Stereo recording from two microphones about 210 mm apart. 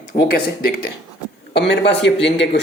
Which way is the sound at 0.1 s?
30° left (ahead or behind).